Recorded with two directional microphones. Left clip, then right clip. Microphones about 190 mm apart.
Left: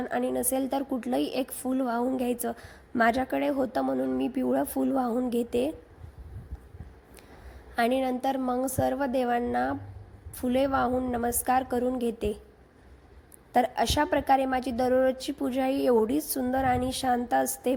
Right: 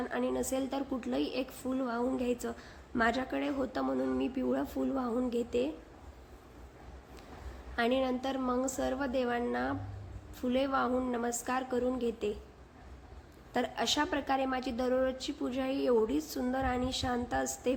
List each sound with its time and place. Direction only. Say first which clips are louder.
0.0 s a woman's voice: left 5 dB; 35° left (ahead or behind)
7.8 s a woman's voice: left 5 dB; 35° left (ahead or behind)
13.5 s a woman's voice: left 7 dB; 35° left (ahead or behind)